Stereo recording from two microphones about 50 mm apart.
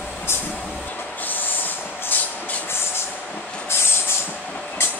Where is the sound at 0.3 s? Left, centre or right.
Left.